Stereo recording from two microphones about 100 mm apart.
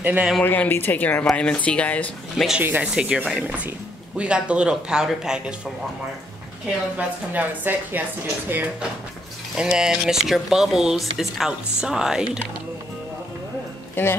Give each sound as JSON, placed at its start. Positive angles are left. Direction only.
{"t": 0.0, "sound": "speech", "side_deg": -15}
{"t": 0.4, "sound": "speech", "side_deg": 20}
{"t": 2.3, "sound": "speech", "side_deg": -5}
{"t": 2.6, "sound": "speech", "side_deg": -15}
{"t": 7.0, "sound": "speech", "side_deg": -20}
{"t": 9.6, "sound": "speech", "side_deg": -5}
{"t": 14.0, "sound": "speech", "side_deg": 20}